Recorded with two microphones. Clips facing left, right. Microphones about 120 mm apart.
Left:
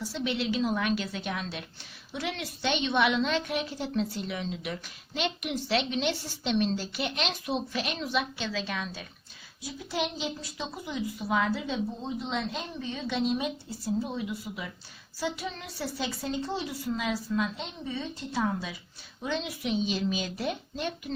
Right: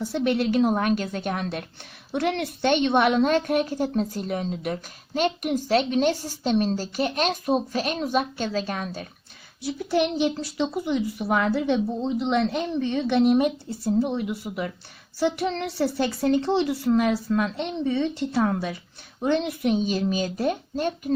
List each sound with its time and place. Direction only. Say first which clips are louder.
0.0 s a woman's voice: right 8 dB; 55° right (ahead or behind)
9.6 s a woman's voice: right 9 dB; 65° right (ahead or behind); by 21.1 s 45° right (ahead or behind)